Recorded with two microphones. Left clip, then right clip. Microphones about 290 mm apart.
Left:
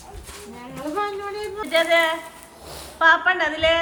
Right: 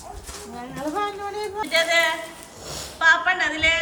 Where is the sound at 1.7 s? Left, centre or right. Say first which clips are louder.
Left 2 dB; centre.